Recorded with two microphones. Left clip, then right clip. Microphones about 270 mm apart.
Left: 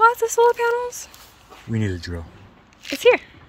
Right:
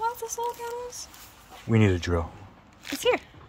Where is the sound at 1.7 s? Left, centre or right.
Right.